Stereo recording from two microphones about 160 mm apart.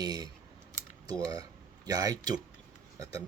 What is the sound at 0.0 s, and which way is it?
Speech, 25° right (ahead or behind).